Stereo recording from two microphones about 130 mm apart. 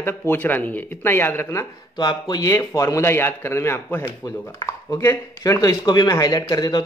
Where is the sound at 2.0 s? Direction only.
30° left (ahead or behind).